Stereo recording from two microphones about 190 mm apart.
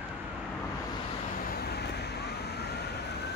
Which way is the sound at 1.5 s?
55° left (ahead or behind).